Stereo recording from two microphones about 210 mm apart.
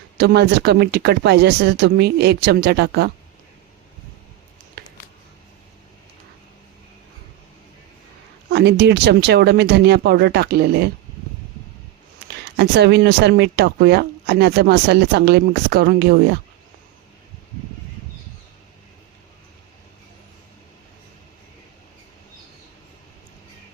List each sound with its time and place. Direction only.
0.2 s speech: 50° right (ahead or behind)
8.4 s speech: 50° right (ahead or behind)
12.3 s speech: 50° right (ahead or behind)